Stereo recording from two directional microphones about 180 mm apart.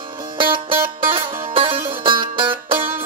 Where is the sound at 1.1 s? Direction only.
30° right (ahead or behind).